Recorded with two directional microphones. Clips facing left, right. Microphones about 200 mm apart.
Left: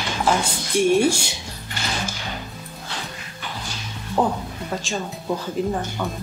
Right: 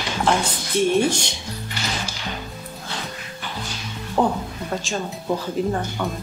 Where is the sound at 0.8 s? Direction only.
10° left (ahead or behind).